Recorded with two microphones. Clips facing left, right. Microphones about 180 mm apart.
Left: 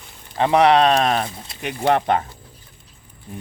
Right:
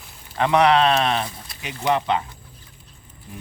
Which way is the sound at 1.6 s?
60° left (ahead or behind).